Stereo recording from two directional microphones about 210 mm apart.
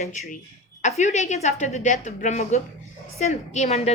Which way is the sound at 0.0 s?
35° left (ahead or behind).